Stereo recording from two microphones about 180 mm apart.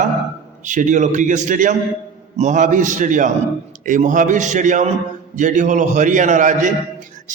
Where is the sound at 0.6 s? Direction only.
45° right (ahead or behind).